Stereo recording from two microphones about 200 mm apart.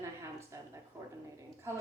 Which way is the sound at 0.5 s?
15° right (ahead or behind).